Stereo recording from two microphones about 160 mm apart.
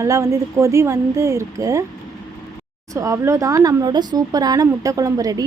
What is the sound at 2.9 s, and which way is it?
A woman's voice, 20° right (ahead or behind).